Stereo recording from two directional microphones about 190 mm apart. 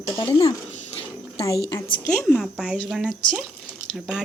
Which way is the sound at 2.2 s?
Centre (ahead or behind).